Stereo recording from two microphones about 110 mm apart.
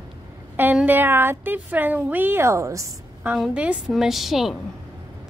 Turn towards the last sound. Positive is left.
turn(degrees=0)  # may be behind; listen again after turning